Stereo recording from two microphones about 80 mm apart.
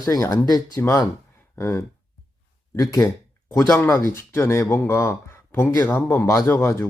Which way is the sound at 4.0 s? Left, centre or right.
Left.